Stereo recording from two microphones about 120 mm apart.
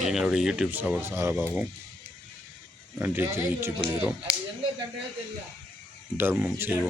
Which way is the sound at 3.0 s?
20° right (ahead or behind).